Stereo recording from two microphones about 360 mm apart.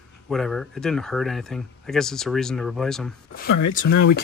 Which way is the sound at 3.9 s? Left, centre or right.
Left.